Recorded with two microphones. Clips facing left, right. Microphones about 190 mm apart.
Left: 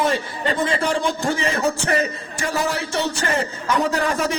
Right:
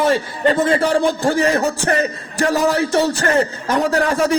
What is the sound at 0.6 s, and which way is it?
A man's voice, 55° right (ahead or behind).